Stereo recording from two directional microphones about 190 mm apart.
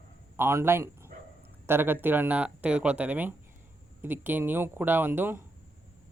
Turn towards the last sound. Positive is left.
turn(degrees=-10)  # may be behind; listen again after turning